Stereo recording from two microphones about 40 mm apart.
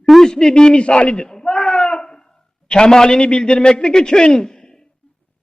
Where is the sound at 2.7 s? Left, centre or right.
Centre.